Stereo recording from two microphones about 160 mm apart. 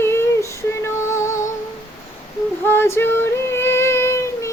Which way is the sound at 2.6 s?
15° left (ahead or behind).